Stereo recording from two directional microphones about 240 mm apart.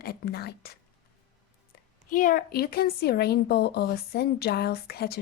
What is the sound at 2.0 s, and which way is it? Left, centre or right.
Speech, left.